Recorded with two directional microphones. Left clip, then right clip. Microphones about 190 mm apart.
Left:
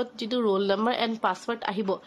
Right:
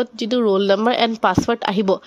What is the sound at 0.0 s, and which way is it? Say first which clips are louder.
A woman's voice: right 8 dB; 30° right (ahead or behind).